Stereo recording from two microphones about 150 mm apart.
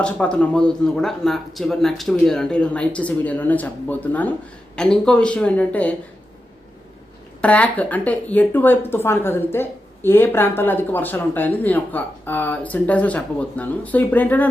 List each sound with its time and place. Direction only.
0.0 s speech: 5° left (ahead or behind)
7.4 s speech: 10° left (ahead or behind)